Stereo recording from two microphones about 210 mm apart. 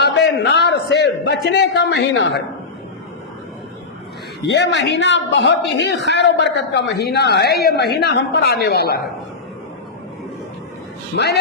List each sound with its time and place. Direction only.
0.0 s a man's voice: 55° left (ahead or behind)
4.4 s speech: 55° left (ahead or behind)